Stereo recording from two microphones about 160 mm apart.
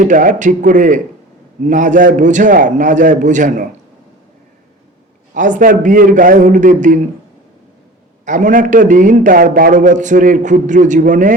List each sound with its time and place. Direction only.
0.0 s a man's voice: 55° right (ahead or behind)
5.3 s a man's voice: 55° right (ahead or behind)
8.2 s a man's voice: 50° right (ahead or behind)